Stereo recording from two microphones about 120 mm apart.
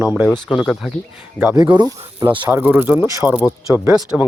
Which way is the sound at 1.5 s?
40° right (ahead or behind).